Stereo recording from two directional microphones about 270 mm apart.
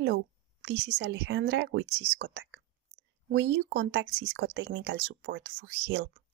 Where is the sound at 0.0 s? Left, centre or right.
Right.